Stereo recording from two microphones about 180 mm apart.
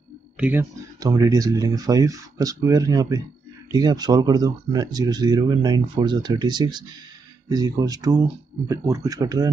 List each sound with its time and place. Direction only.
0.4 s speech: 10° right (ahead or behind)
1.0 s speech: 20° right (ahead or behind)